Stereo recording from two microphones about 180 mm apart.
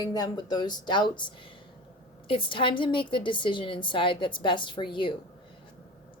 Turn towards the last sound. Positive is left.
turn(degrees=25)  # may be behind; listen again after turning